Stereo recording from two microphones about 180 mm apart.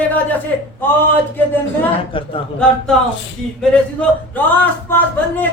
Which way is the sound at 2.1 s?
30° left (ahead or behind).